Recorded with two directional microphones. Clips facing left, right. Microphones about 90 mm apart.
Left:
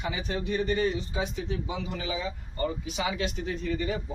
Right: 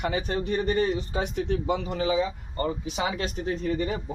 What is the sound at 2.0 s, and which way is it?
Speech, 40° right (ahead or behind).